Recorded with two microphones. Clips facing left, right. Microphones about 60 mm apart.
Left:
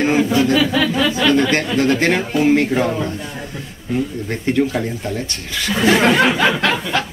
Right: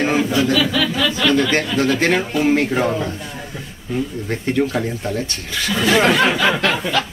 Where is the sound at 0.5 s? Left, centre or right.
Left.